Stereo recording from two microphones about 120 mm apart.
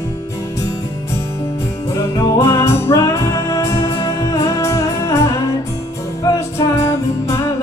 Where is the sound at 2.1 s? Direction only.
30° left (ahead or behind).